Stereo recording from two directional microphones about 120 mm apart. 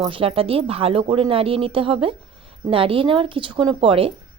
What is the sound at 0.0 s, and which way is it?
Speech, 45° right (ahead or behind).